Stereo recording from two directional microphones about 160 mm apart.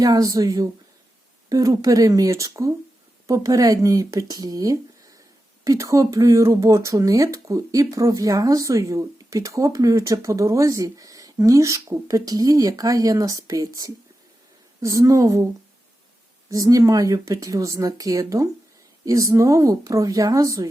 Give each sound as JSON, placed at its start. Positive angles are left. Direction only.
{"t": 0.0, "sound": "speech", "side_deg": -20}
{"t": 16.5, "sound": "speech", "side_deg": -20}